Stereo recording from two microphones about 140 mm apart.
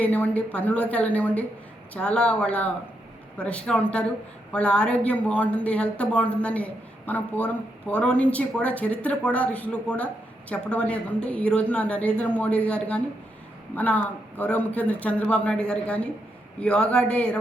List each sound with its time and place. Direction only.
0.0 s a woman's voice: 10° left (ahead or behind)